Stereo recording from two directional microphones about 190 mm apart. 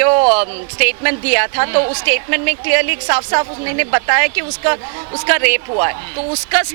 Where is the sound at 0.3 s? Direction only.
10° right (ahead or behind).